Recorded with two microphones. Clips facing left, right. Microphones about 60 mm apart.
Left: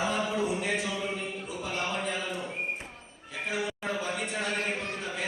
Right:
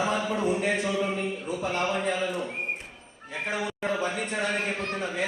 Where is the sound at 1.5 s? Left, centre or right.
Right.